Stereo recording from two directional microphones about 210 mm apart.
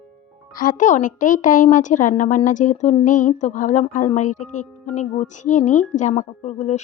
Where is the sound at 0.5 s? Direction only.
40° left (ahead or behind).